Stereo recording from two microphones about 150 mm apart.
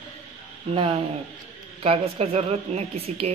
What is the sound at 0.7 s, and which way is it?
A woman's voice, 40° right (ahead or behind).